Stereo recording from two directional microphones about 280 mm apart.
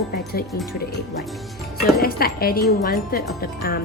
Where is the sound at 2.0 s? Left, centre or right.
Left.